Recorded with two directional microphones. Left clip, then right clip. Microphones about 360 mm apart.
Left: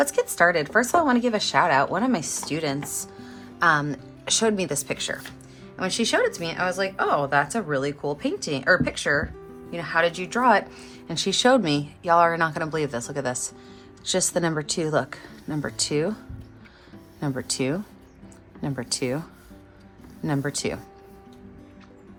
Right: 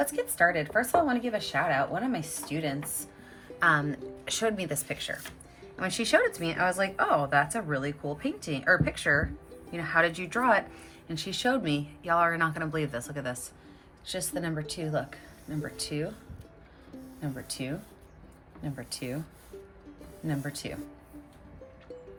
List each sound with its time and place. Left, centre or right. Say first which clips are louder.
0.0 s a woman's voice: left 6 dB; centre
17.5 s a woman's voice: left 10 dB; centre
20.2 s a woman's voice: left 9 dB; centre